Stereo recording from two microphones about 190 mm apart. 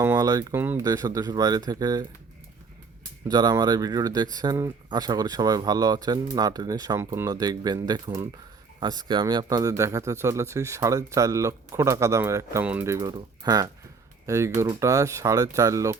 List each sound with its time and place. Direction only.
0.0 s speech: 15° right (ahead or behind)
3.2 s speech: 20° right (ahead or behind)